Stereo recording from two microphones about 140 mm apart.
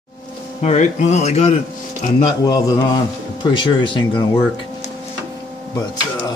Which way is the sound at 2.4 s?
25° left (ahead or behind).